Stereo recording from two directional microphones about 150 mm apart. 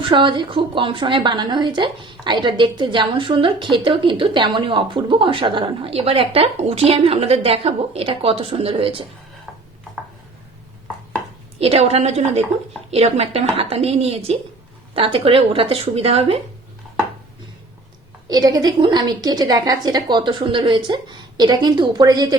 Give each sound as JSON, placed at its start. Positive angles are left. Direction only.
{"t": 0.0, "sound": "a woman's voice", "side_deg": -35}
{"t": 11.6, "sound": "a woman's voice", "side_deg": -45}
{"t": 18.3, "sound": "a woman's voice", "side_deg": -25}